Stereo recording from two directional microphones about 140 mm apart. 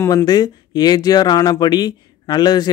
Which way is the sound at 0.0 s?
25° left (ahead or behind).